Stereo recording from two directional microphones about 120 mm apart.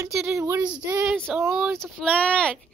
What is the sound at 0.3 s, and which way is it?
Speech, 20° right (ahead or behind).